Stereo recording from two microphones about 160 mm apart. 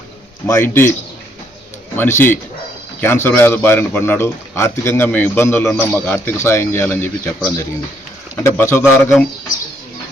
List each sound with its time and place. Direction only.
0.4 s speech: 15° left (ahead or behind)
2.0 s speech: 15° left (ahead or behind)